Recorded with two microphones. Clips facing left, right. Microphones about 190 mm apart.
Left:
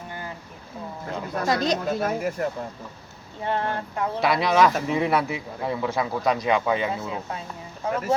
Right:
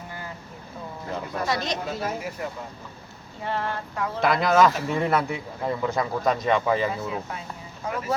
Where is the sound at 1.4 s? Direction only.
45° left (ahead or behind).